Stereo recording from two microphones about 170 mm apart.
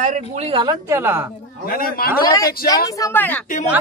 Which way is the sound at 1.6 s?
60° left (ahead or behind).